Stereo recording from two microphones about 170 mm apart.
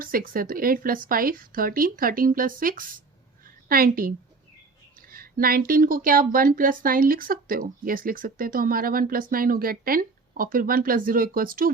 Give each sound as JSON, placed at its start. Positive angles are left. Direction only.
{"t": 0.0, "sound": "speech", "side_deg": -55}
{"t": 3.4, "sound": "a sound", "side_deg": -60}
{"t": 4.9, "sound": "speech", "side_deg": -60}